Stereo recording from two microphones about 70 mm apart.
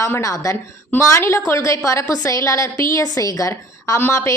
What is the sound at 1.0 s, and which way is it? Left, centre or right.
A woman's voice, left.